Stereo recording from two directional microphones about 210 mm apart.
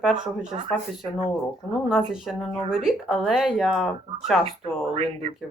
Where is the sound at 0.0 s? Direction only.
5° right (ahead or behind).